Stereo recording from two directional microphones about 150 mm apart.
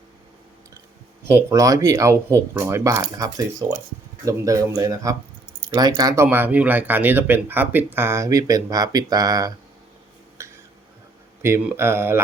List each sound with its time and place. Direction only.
1.4 s speech: 20° right (ahead or behind)
6.2 s speech: 10° right (ahead or behind)
10.4 s a sound: 20° right (ahead or behind)
11.4 s speech: 15° right (ahead or behind)